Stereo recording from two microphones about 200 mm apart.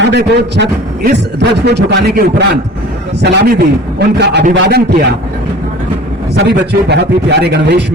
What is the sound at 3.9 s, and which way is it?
Speech, 55° right (ahead or behind).